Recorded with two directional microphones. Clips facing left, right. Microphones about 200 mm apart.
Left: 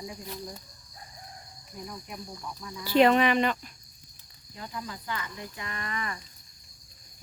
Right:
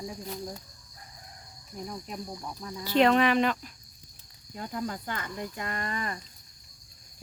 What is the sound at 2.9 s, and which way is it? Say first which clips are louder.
Speech: left 1 dB; 5° left (ahead or behind).